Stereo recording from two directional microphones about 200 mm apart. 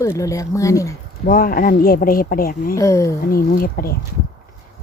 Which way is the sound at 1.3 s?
45° left (ahead or behind).